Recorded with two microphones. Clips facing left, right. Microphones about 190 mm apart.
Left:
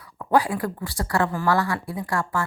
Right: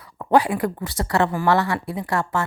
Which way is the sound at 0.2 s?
20° right (ahead or behind).